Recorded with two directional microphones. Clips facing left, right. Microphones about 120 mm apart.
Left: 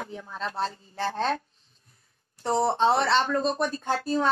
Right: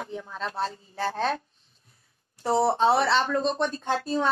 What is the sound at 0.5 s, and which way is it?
Speech, 30° left (ahead or behind).